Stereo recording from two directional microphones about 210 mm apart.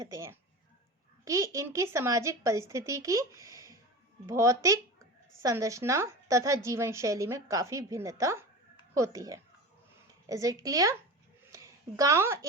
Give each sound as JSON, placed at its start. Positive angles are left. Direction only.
{"t": 0.0, "sound": "a woman's voice", "side_deg": -15}